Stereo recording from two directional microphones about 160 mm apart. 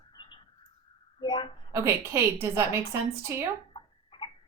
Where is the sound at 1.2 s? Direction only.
30° left (ahead or behind).